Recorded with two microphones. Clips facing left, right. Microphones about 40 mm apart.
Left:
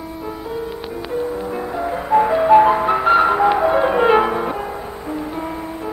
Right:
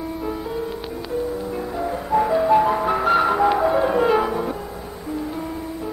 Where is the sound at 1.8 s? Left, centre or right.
Left.